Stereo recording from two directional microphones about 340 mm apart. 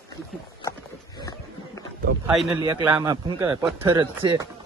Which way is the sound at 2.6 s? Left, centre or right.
Centre.